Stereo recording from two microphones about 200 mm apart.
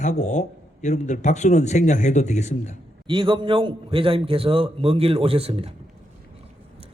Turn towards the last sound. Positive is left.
turn(degrees=-30)  # may be behind; listen again after turning